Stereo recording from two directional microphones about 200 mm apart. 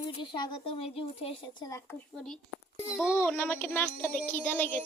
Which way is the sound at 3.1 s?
10° left (ahead or behind).